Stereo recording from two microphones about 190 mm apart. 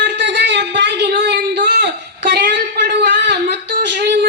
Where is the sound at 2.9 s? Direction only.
65° right (ahead or behind).